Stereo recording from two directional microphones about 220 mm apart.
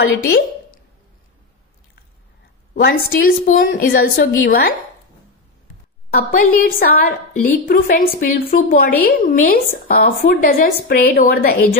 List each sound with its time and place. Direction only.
2.7 s a woman's voice: 40° left (ahead or behind)
6.1 s a woman's voice: 40° left (ahead or behind)